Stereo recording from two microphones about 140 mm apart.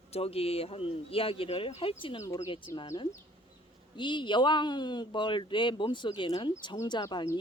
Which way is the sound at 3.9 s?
35° left (ahead or behind).